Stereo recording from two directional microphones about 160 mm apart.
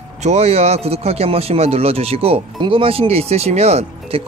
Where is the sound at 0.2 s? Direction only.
40° right (ahead or behind).